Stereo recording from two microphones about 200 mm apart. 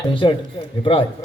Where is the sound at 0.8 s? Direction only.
25° left (ahead or behind).